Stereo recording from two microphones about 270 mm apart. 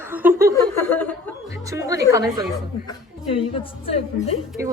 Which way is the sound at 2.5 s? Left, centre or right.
Centre.